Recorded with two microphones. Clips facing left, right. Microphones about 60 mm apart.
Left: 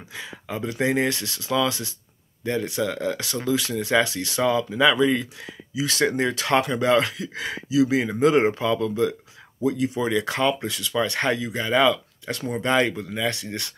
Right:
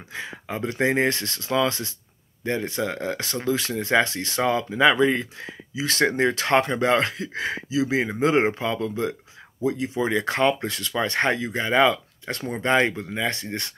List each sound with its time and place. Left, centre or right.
0.1 s speech: right